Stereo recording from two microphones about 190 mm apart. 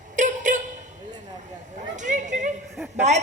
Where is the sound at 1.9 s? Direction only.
40° right (ahead or behind).